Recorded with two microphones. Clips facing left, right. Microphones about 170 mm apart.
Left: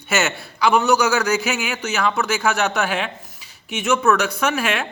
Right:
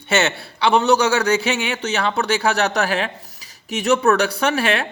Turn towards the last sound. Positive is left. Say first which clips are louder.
# right 2 dB
turn(degrees=-35)  # may be behind; listen again after turning